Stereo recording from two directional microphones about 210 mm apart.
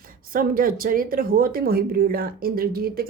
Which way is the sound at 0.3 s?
40° right (ahead or behind).